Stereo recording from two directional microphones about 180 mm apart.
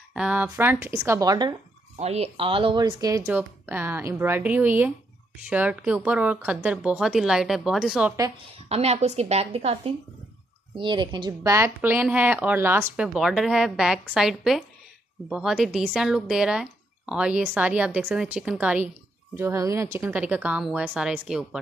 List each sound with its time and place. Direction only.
0.1 s speech: 5° right (ahead or behind)
2.0 s speech: 35° right (ahead or behind); by 3.3 s 20° right (ahead or behind)
3.3 s speech: 10° right (ahead or behind)
8.6 s a woman's voice: 35° right (ahead or behind); by 21.5 s 5° right (ahead or behind)